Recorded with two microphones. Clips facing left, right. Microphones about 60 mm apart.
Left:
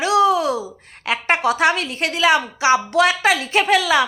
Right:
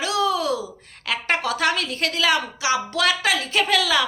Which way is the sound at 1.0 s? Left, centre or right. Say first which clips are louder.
Left 5 dB; left.